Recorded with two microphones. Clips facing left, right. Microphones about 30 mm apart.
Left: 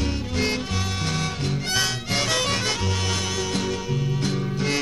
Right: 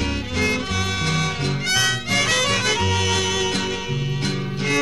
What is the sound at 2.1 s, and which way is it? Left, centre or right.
Music, right.